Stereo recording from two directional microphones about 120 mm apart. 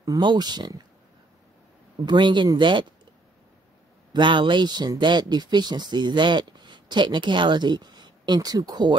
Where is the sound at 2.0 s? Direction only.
40° right (ahead or behind).